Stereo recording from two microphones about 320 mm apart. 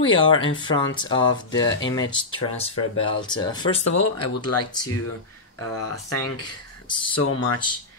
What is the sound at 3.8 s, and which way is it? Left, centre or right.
Speech, left.